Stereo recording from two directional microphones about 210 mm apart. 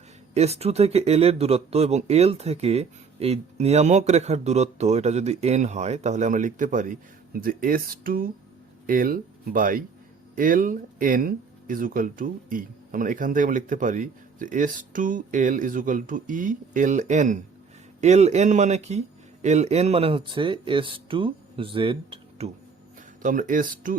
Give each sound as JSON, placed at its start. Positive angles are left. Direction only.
{"t": 0.3, "sound": "a man's voice", "side_deg": -30}
{"t": 23.2, "sound": "speech", "side_deg": -40}